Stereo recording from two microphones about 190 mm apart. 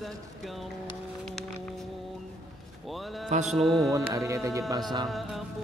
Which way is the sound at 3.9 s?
15° right (ahead or behind).